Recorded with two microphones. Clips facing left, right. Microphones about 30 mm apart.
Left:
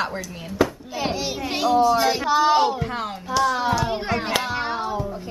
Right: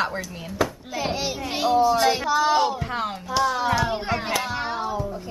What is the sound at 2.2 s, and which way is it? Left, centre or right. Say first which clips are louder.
Speech: left 2 dB; centre.